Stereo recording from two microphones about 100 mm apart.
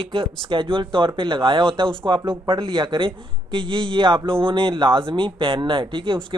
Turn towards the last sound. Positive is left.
turn(degrees=-55)  # may be behind; listen again after turning